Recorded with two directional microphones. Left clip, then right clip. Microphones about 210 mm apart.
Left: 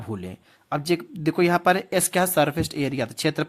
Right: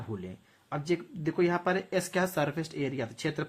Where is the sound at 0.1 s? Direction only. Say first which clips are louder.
Left 8 dB; 45° left (ahead or behind).